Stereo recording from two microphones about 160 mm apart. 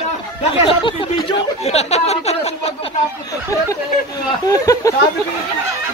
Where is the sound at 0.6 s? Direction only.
35° left (ahead or behind).